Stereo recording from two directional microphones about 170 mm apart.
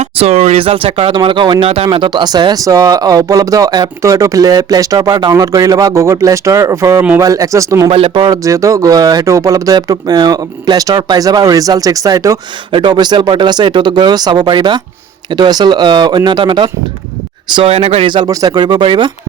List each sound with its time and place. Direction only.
0.0 s speech: 35° right (ahead or behind); by 7.9 s 20° right (ahead or behind)
7.9 s speech: 35° right (ahead or behind)